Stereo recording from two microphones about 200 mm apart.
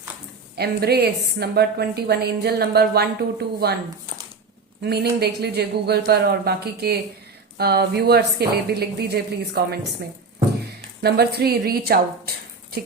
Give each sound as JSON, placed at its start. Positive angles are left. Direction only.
{"t": 0.5, "sound": "a woman's voice", "side_deg": -55}
{"t": 4.8, "sound": "a woman's voice", "side_deg": -55}
{"t": 11.0, "sound": "a woman's voice", "side_deg": -55}